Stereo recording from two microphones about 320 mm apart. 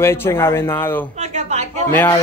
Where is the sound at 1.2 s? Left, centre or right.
Right.